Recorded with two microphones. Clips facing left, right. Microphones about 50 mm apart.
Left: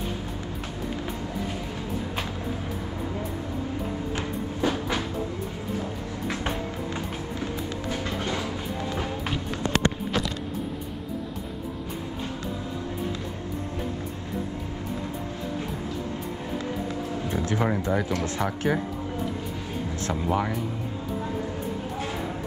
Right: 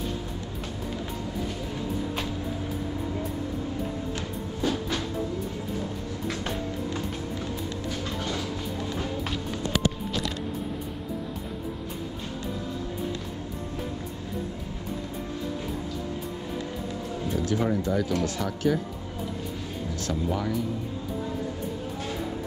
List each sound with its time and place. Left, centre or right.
4.6 s train: centre
17.3 s music: left
18.2 s speech: left
20.1 s speech: left